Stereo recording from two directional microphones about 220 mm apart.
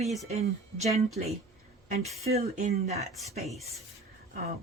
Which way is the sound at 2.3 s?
30° right (ahead or behind).